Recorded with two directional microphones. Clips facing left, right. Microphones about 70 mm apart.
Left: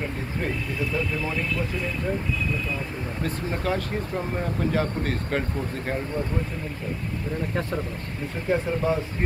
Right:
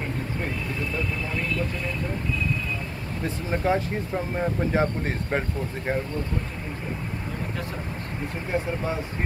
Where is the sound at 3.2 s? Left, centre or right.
Right.